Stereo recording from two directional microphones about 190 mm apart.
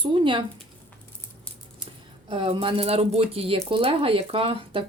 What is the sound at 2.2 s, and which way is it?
A woman's voice, 25° right (ahead or behind).